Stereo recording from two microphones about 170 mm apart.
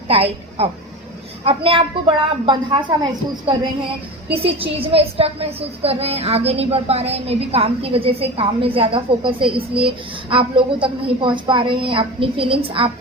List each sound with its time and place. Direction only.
0.1 s a woman's voice: 35° right (ahead or behind)